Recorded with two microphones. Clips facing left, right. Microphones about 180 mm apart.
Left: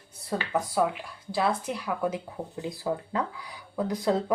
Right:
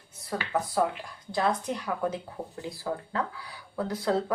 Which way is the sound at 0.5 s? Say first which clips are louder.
Even; 10° left (ahead or behind).